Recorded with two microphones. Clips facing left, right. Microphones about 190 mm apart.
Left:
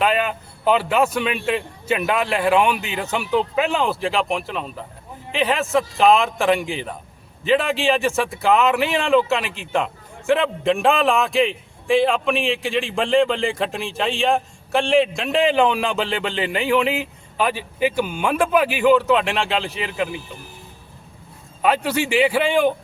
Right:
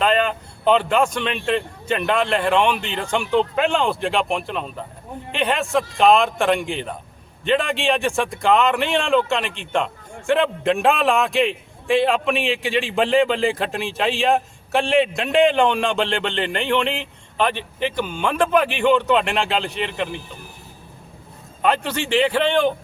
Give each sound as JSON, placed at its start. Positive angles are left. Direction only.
{"t": 0.0, "sound": "a man's voice", "side_deg": 5}
{"t": 21.6, "sound": "a man's voice", "side_deg": 5}